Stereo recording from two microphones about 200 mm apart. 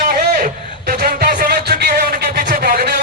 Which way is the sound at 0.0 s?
45° right (ahead or behind).